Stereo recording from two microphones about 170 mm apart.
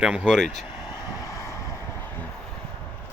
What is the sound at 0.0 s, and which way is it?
Speech, 5° right (ahead or behind).